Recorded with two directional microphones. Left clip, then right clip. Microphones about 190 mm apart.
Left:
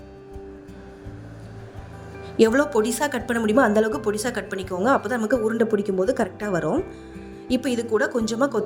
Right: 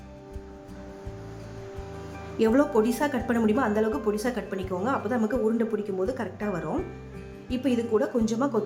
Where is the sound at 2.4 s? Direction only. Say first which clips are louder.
Left 4 dB; 30° left (ahead or behind).